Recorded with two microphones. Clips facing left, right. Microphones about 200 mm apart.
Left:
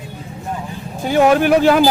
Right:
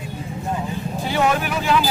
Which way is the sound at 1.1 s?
60° left (ahead or behind).